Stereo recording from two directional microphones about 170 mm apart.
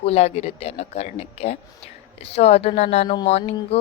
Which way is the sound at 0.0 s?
40° left (ahead or behind).